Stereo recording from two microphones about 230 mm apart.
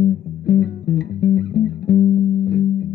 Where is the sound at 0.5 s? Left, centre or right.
Left.